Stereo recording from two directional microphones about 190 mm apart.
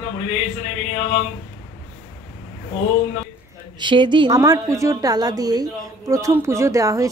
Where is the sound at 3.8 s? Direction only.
25° right (ahead or behind).